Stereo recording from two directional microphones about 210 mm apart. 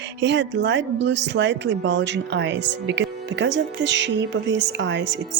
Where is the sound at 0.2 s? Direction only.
55° right (ahead or behind).